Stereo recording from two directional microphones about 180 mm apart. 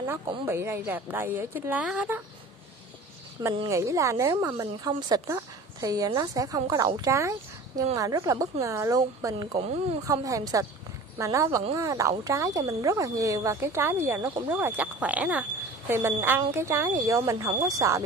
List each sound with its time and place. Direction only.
0.5 s speech: 15° right (ahead or behind)
3.5 s a woman's voice: 15° right (ahead or behind)